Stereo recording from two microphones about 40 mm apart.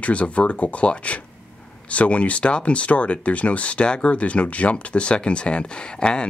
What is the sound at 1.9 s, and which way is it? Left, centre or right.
Speech, left.